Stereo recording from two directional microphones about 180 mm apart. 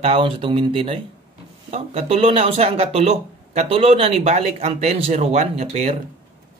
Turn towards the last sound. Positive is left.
turn(degrees=-35)  # may be behind; listen again after turning